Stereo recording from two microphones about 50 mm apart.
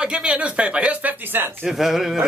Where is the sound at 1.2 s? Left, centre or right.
Right.